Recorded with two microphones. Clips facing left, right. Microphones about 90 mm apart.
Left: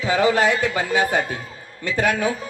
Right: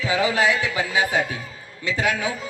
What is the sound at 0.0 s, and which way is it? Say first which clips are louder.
A man's voice: left 3 dB; 45° left (ahead or behind).